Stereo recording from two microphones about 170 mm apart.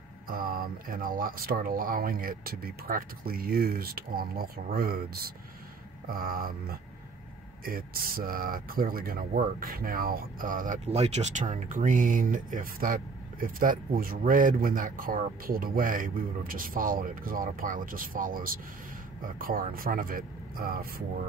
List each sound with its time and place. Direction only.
0.3 s speech: 55° right (ahead or behind)
10.9 s speech: 40° right (ahead or behind); by 20.9 s 60° right (ahead or behind)